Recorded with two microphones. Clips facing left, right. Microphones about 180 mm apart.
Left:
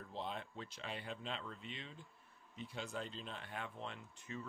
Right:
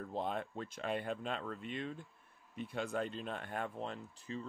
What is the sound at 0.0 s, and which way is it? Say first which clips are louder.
Speech: right 7 dB; 50° right (ahead or behind).